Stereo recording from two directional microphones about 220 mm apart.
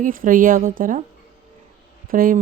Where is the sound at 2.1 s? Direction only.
40° right (ahead or behind).